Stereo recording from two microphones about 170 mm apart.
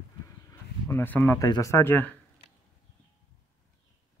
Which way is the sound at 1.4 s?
20° left (ahead or behind).